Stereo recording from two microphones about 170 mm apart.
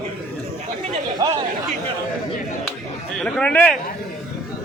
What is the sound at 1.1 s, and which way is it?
Speech, 20° right (ahead or behind).